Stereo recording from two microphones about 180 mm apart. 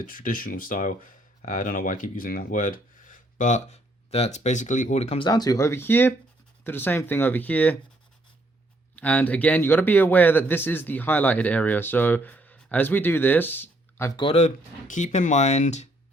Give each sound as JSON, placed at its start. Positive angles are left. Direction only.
{"t": 0.0, "sound": "a man's voice", "side_deg": 50}
{"t": 9.0, "sound": "a man's voice", "side_deg": 10}
{"t": 14.2, "sound": "speech", "side_deg": 35}